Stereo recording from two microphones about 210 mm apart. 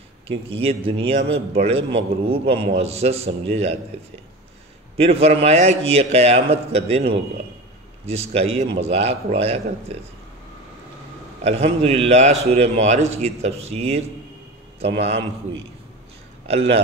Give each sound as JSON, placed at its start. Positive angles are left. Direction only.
{"t": 0.3, "sound": "a man's voice", "side_deg": -30}
{"t": 4.9, "sound": "a man's voice", "side_deg": -30}
{"t": 8.1, "sound": "a man's voice", "side_deg": -30}
{"t": 11.4, "sound": "a man's voice", "side_deg": -30}
{"t": 16.4, "sound": "a man's voice", "side_deg": -30}